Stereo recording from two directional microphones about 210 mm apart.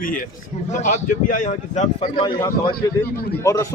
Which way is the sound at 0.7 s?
35° left (ahead or behind).